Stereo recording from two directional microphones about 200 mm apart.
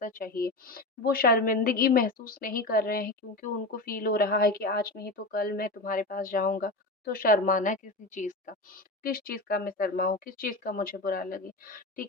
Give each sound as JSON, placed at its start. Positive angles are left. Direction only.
{"t": 0.0, "sound": "speech", "side_deg": 45}